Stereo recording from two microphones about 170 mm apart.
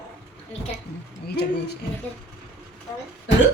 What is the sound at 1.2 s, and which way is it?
Speech, 75° left (ahead or behind).